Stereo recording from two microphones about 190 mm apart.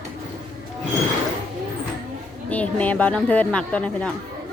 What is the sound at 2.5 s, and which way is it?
A woman's voice, 10° left (ahead or behind).